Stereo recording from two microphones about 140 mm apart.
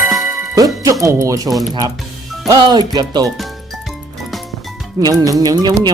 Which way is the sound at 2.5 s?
30° right (ahead or behind).